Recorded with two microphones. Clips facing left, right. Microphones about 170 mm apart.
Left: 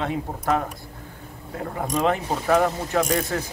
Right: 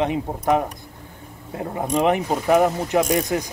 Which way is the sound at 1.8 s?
20° right (ahead or behind).